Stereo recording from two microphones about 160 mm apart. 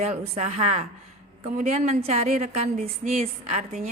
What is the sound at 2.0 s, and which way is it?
A woman's voice, 45° right (ahead or behind).